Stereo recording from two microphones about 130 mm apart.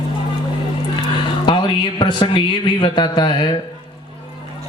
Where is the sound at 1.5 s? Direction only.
35° left (ahead or behind).